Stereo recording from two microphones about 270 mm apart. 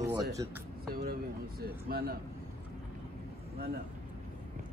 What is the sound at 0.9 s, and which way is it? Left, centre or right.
Speech, right.